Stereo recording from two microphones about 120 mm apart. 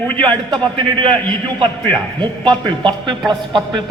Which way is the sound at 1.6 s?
40° right (ahead or behind).